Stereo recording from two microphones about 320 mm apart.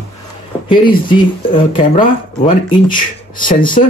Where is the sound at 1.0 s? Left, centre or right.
Centre.